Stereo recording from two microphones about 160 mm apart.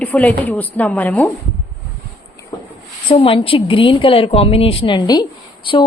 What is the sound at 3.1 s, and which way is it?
A woman's voice, 35° left (ahead or behind).